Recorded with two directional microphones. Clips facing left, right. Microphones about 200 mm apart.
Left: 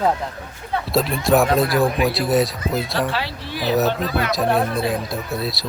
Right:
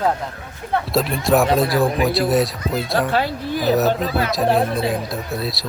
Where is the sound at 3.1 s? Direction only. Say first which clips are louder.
Right 6 dB; 50° right (ahead or behind).